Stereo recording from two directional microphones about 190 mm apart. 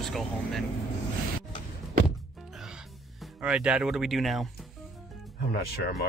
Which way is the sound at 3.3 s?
5° right (ahead or behind).